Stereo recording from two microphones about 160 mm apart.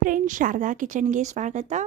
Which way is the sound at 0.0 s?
55° right (ahead or behind).